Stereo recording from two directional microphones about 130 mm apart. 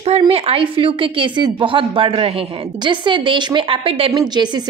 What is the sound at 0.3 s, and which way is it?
A woman's voice, 50° right (ahead or behind).